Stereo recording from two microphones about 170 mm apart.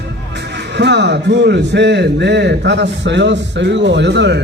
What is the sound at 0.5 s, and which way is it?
A man's voice, 90° right.